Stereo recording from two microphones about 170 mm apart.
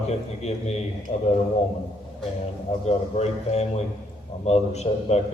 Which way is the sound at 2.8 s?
40° left (ahead or behind).